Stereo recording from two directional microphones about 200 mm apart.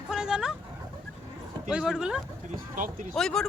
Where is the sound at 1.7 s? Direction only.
5° right (ahead or behind).